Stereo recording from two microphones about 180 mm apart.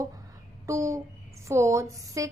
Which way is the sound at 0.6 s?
15° right (ahead or behind).